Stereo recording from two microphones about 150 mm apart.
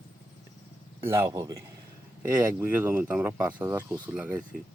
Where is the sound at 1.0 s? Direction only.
20° right (ahead or behind).